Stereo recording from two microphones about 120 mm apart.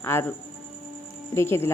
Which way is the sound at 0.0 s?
20° left (ahead or behind).